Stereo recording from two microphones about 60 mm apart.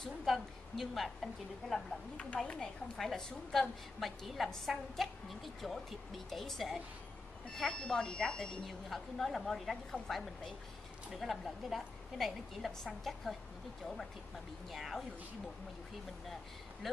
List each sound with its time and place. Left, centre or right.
0.0 s a woman's voice: centre
2.1 s a woman's voice: left
3.0 s a woman's voice: centre
14.7 s a woman's voice: centre
16.8 s a woman's voice: centre